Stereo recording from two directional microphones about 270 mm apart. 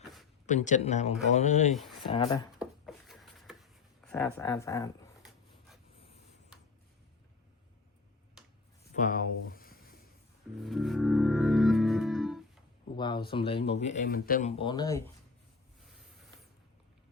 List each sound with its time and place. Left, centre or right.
0.4 s speech: left
2.6 s a sound: centre
4.4 s speech: centre
9.0 s speech: left
10.6 s music: centre
13.0 s speech: centre
14.6 s speech: centre